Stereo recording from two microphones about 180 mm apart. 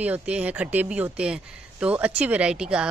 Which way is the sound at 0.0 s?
5° right (ahead or behind).